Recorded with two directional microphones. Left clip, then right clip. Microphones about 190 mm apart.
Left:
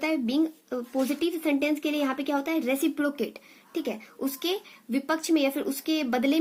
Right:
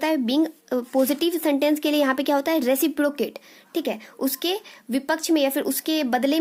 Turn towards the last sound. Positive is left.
turn(degrees=-40)  # may be behind; listen again after turning